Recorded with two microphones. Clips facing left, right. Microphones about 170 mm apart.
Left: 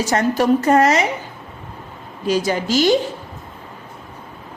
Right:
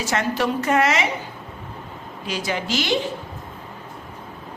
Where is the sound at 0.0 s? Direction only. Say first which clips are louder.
Left 5 dB; 40° left (ahead or behind).